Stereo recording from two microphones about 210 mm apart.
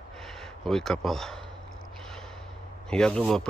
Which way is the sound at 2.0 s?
5° left (ahead or behind).